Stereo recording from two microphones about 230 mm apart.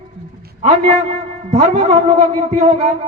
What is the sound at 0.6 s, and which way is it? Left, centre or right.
A man's voice, right.